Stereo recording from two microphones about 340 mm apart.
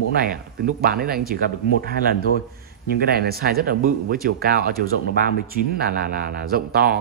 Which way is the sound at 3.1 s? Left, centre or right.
Right.